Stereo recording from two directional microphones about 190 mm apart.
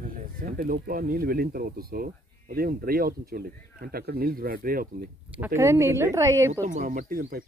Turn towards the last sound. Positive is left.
turn(degrees=-50)  # may be behind; listen again after turning